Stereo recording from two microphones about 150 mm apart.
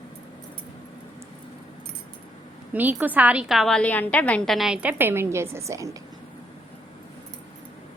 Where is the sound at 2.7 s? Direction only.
10° right (ahead or behind).